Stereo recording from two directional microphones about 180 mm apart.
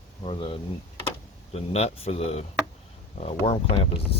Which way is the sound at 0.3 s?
30° left (ahead or behind).